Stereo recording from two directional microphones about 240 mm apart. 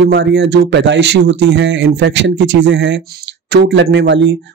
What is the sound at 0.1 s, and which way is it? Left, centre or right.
Speech, right.